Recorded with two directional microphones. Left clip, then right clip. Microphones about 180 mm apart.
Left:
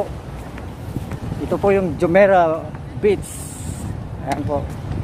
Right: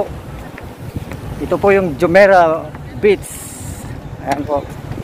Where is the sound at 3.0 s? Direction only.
5° right (ahead or behind).